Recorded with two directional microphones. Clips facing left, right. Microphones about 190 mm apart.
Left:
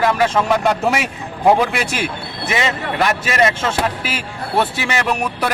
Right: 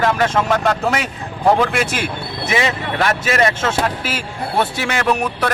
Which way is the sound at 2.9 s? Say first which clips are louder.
Even; 5° left (ahead or behind).